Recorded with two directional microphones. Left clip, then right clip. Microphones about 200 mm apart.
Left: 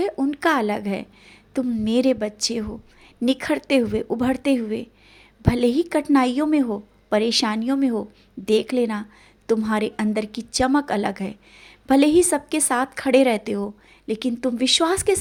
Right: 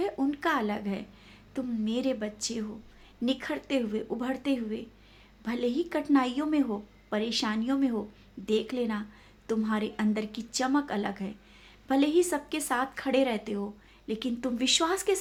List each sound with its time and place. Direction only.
0.0 s a woman's voice: 30° left (ahead or behind)